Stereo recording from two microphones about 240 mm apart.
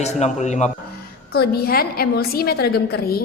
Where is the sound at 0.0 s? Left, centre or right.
Left.